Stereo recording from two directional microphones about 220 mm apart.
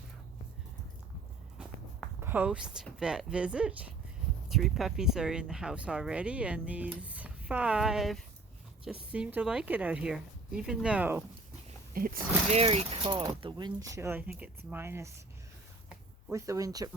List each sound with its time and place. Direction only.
1.5 s walk: 5° right (ahead or behind)
4.4 s speech: centre (ahead or behind)
11.9 s speech: 40° right (ahead or behind); by 15.1 s 10° right (ahead or behind)
16.3 s speech: 15° right (ahead or behind)